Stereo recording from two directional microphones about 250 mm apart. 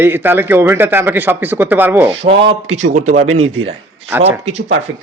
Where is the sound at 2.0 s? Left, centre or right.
Right.